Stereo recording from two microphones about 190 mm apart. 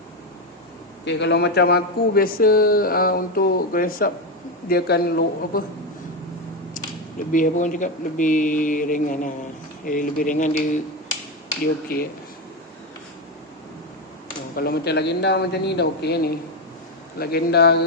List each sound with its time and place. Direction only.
1.0 s a man's voice: 65° left (ahead or behind)
7.3 s a man's voice: 45° left (ahead or behind)
11.6 s a man's voice: 50° left (ahead or behind)
14.5 s a man's voice: 55° left (ahead or behind)